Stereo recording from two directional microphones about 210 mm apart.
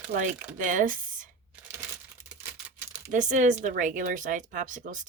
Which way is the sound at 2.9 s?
35° right (ahead or behind).